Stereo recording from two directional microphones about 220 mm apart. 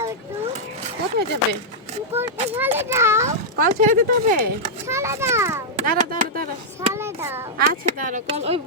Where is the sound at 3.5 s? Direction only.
35° right (ahead or behind).